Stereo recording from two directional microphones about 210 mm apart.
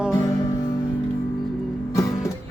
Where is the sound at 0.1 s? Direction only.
15° left (ahead or behind).